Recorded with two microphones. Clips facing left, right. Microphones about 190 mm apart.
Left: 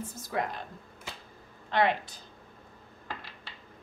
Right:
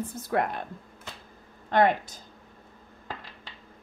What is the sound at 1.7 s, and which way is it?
Speech, 45° right (ahead or behind).